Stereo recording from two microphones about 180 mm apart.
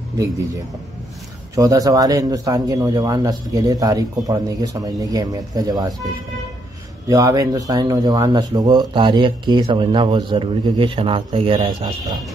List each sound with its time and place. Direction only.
1.5 s speech: 20° right (ahead or behind)
7.1 s speech: 20° right (ahead or behind)